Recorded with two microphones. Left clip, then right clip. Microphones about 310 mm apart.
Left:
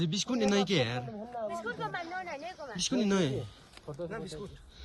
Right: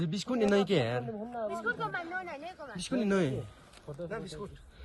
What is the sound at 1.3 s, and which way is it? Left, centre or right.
Speech, left.